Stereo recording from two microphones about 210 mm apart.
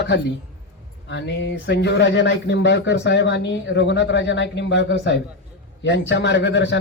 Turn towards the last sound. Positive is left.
turn(degrees=60)  # may be behind; listen again after turning